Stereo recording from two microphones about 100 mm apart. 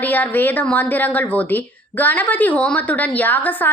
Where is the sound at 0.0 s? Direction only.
15° left (ahead or behind).